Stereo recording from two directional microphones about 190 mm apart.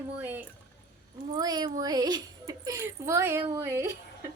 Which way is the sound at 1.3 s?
20° right (ahead or behind).